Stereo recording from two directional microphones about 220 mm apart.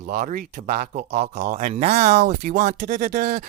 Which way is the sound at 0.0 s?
40° right (ahead or behind).